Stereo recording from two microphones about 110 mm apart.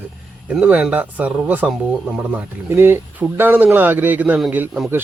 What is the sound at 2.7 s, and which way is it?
Speech, 20° right (ahead or behind).